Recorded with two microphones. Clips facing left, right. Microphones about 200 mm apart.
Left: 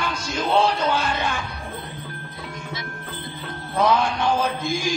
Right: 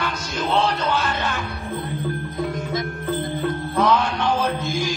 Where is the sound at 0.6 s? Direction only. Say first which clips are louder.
Even; 10° left (ahead or behind).